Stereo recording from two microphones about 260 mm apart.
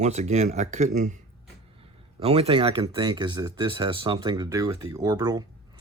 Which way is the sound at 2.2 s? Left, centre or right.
Right.